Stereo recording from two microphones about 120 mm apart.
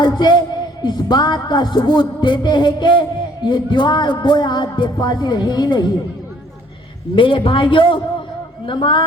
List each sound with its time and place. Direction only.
0.0 s speech: 35° left (ahead or behind)
7.2 s a man's voice: 45° left (ahead or behind)